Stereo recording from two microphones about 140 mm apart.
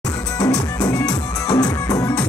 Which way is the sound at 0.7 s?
25° left (ahead or behind).